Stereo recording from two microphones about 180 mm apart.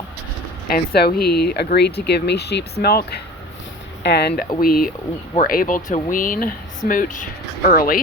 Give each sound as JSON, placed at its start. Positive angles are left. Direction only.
{"t": 0.7, "sound": "speech", "side_deg": 60}
{"t": 4.6, "sound": "speech", "side_deg": 55}